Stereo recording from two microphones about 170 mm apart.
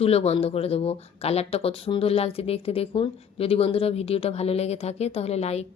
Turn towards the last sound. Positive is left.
turn(degrees=40)  # may be behind; listen again after turning